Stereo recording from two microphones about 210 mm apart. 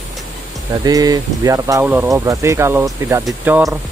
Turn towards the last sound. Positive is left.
turn(degrees=-5)  # may be behind; listen again after turning